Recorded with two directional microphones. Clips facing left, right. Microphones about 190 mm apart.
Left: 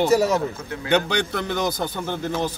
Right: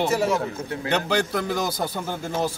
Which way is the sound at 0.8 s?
Centre (ahead or behind).